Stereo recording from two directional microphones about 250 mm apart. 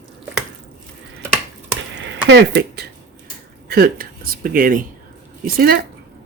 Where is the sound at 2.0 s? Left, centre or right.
Right.